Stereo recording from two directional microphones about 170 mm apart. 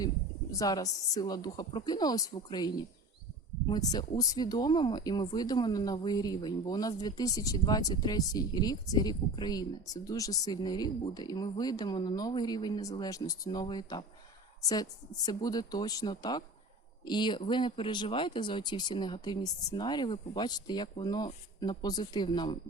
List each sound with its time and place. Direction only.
0.6 s a woman's voice: 20° left (ahead or behind)